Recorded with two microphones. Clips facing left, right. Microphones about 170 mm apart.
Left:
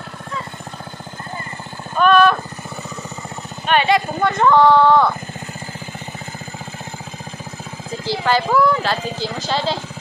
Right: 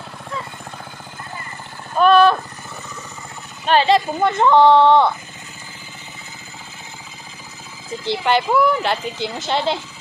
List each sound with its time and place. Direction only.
2.0 s a sound: 30° right (ahead or behind)
3.6 s speech: 30° right (ahead or behind)
8.0 s speech: 20° right (ahead or behind)